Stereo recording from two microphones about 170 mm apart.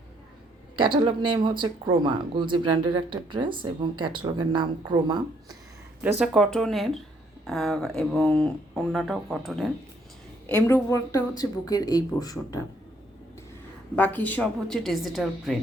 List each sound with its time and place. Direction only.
0.8 s speech: 30° right (ahead or behind)
6.0 s speech: 5° right (ahead or behind)
10.4 s speech: 10° left (ahead or behind)
13.9 s speech: 10° left (ahead or behind)